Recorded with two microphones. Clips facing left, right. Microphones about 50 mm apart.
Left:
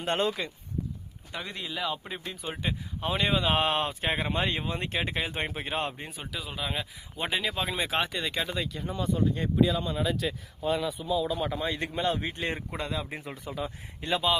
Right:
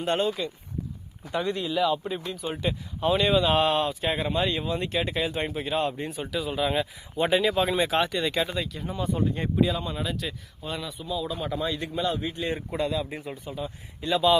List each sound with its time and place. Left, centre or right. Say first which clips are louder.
1.3 s speech: right 9 dB; centre
3.7 s speech: right 3 dB; left
6.0 s speech: right 8 dB; centre
8.4 s speech: right 3 dB; centre
9.1 s speech: even; right
9.6 s speech: even; centre
11.7 s speech: right 1 dB; left
12.7 s speech: right 5 dB; left
13.2 s speech: right 1 dB; left
13.7 s speech: right 4 dB; left